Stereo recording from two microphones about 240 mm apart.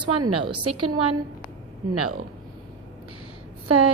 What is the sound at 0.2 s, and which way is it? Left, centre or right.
A woman's voice, right.